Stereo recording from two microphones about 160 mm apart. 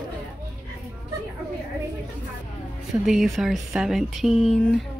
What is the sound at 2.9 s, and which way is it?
Speech, centre (ahead or behind).